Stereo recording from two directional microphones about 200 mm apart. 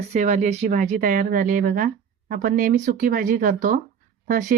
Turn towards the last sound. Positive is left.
turn(degrees=-40)  # may be behind; listen again after turning